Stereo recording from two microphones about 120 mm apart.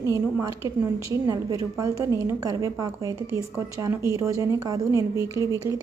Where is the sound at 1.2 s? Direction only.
30° right (ahead or behind).